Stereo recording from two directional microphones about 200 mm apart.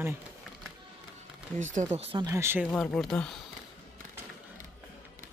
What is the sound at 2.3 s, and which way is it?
Speech, 10° right (ahead or behind).